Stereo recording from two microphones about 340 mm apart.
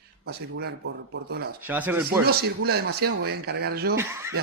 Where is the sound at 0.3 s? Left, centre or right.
Right.